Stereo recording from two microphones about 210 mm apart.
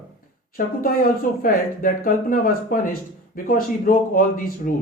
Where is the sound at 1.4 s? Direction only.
40° left (ahead or behind).